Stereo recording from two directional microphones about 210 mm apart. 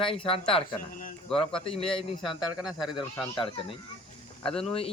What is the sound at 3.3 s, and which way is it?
Speech, 25° left (ahead or behind).